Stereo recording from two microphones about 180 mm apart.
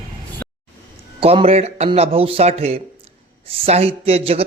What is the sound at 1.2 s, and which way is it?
Speech, 35° right (ahead or behind).